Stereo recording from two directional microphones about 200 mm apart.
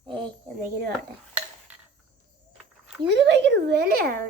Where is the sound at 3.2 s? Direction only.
60° right (ahead or behind).